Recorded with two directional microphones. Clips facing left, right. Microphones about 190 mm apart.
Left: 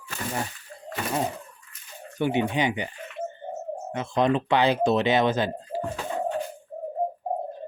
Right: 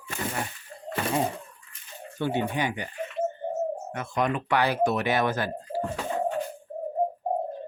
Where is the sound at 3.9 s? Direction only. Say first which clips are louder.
Left 8 dB; 25° left (ahead or behind).